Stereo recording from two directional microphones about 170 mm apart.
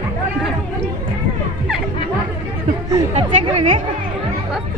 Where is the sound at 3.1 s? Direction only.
40° right (ahead or behind).